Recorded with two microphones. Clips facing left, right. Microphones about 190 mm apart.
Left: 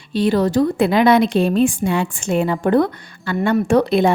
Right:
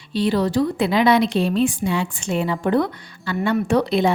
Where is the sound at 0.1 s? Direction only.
50° left (ahead or behind).